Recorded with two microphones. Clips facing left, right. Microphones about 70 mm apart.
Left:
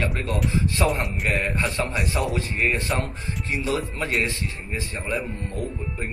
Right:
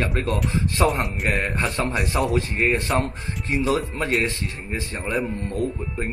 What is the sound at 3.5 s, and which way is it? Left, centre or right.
Speech, right.